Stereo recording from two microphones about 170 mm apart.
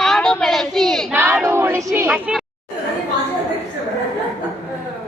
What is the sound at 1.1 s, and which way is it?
Speech, 10° right (ahead or behind).